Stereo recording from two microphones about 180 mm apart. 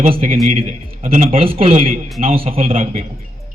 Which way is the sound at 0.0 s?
30° right (ahead or behind).